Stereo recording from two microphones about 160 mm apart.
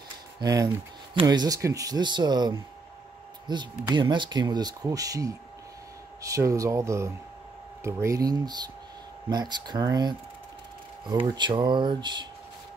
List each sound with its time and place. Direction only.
0.4 s speech: 25° right (ahead or behind)